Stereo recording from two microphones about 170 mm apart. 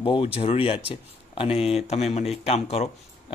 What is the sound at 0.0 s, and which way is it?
Speech, 30° left (ahead or behind).